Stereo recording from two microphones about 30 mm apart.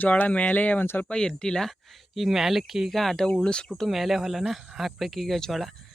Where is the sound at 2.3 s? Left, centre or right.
Centre.